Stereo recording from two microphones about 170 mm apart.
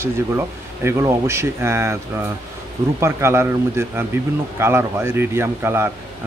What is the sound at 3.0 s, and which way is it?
Speech, 15° right (ahead or behind).